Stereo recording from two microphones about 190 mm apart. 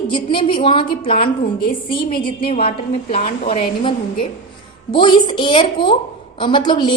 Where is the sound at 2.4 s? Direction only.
30° left (ahead or behind).